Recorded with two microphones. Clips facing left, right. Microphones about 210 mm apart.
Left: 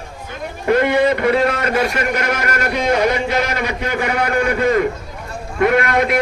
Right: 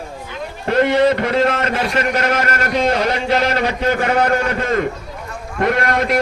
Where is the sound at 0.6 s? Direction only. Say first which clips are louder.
Even; 55° left (ahead or behind).